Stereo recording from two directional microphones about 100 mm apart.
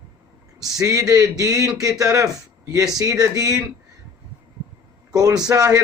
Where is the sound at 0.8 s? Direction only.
35° right (ahead or behind).